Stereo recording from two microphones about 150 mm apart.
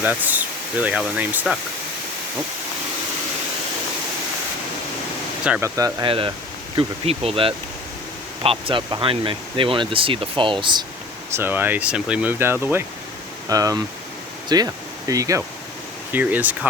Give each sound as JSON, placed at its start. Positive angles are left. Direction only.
{"t": 0.0, "sound": "speech", "side_deg": -10}
{"t": 5.5, "sound": "speech", "side_deg": -15}
{"t": 6.1, "sound": "speech", "side_deg": -35}
{"t": 11.3, "sound": "speech", "side_deg": -15}
{"t": 16.1, "sound": "speech", "side_deg": -10}